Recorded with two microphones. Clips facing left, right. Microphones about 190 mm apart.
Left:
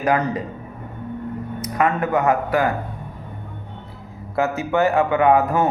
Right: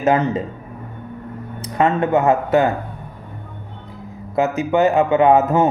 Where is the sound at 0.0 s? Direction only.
25° right (ahead or behind).